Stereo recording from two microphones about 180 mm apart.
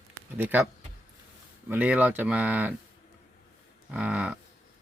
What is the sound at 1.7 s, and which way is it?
Speech, 10° right (ahead or behind).